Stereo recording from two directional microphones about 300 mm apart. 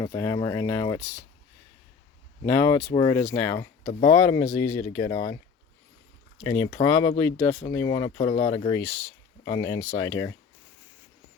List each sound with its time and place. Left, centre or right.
0.0 s speech: centre
2.4 s speech: centre
6.4 s speech: centre